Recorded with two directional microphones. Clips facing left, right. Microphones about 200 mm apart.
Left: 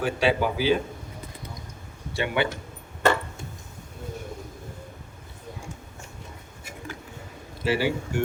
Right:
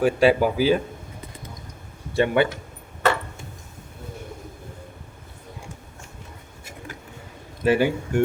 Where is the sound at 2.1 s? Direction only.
45° right (ahead or behind).